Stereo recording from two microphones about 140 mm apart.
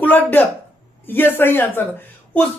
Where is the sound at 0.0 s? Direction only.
15° left (ahead or behind).